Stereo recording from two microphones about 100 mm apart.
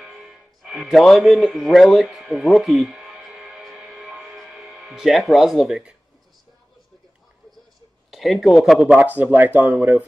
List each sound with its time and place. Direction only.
0.0 s music: centre (ahead or behind)
8.1 s speech: centre (ahead or behind)
8.7 s speech: 10° right (ahead or behind)
9.7 s speech: 5° right (ahead or behind)